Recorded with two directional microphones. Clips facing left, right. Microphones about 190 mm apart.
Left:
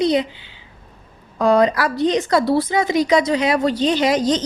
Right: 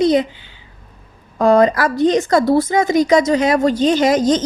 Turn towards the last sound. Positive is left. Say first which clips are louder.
# right 3 dB
turn(degrees=-45)  # may be behind; listen again after turning